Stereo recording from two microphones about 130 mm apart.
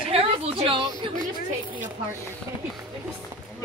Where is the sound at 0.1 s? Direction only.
45° right (ahead or behind).